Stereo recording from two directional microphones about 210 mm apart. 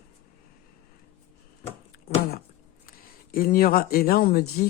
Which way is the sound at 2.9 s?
45° left (ahead or behind).